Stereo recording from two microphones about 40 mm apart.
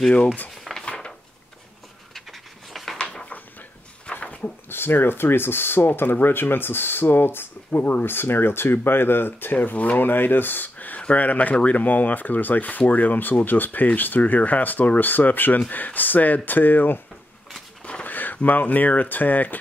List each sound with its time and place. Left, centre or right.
0.8 s cutlery: left
2.1 s a sound: centre
3.0 s a sound: left
4.2 s dog: left
4.6 s speech: left
5.9 s speech: left
9.6 s speech: left
9.9 s speech: left
11.0 s speech: left
18.0 s speech: left